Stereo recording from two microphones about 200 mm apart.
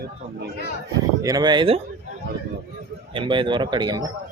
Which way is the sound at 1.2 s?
20° right (ahead or behind).